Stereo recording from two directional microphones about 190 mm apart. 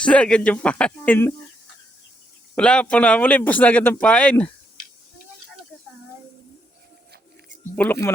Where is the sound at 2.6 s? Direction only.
5° left (ahead or behind).